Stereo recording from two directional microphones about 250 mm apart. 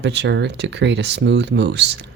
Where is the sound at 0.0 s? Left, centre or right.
Right.